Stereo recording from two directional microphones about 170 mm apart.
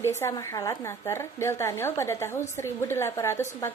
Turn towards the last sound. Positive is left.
turn(degrees=15)  # may be behind; listen again after turning